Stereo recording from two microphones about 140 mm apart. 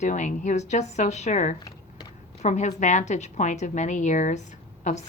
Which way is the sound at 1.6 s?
30° left (ahead or behind).